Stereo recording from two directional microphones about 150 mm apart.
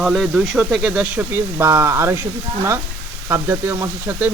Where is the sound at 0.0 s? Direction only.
Centre (ahead or behind); by 2.2 s 20° right (ahead or behind).